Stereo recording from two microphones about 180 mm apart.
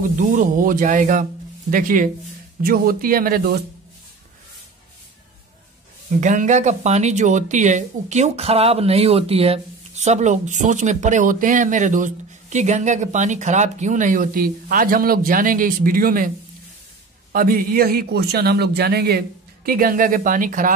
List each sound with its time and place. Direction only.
0.0 s speech: 45° right (ahead or behind)
6.2 s speech: 45° right (ahead or behind)
17.3 s a man's voice: 55° right (ahead or behind)